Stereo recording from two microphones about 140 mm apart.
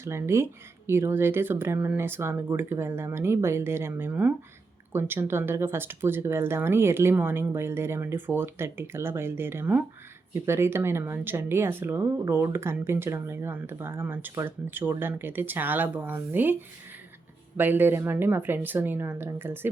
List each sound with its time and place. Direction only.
0.0 s speech: 20° right (ahead or behind)